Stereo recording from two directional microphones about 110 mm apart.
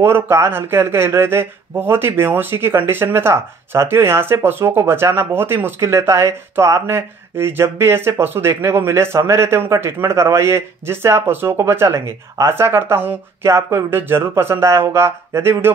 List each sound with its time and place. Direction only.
0.0 s speech: 25° right (ahead or behind)